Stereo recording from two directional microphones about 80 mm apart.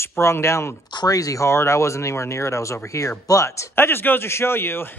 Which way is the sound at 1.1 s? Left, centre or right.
Left.